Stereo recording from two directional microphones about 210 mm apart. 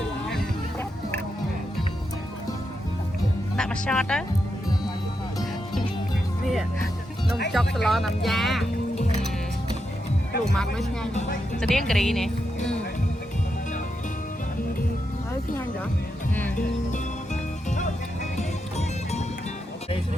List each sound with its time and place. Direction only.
0.3 s music: 5° left (ahead or behind)
3.6 s speech: 5° left (ahead or behind)
6.4 s music: centre (ahead or behind)
7.5 s speech: centre (ahead or behind)
10.5 s speech: 5° left (ahead or behind)
11.1 s speech: 35° left (ahead or behind)
11.7 s speech: centre (ahead or behind)
18.3 s music: 30° left (ahead or behind)